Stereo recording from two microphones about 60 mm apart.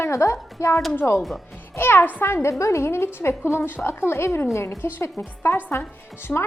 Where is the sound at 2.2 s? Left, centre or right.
Left.